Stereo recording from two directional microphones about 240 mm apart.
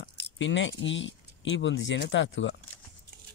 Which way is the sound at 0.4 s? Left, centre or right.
Left.